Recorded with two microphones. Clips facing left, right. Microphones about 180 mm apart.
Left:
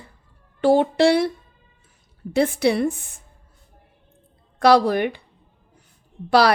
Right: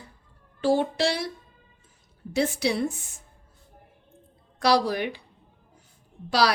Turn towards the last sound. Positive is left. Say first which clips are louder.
# left 6 dB
turn(degrees=55)  # may be behind; listen again after turning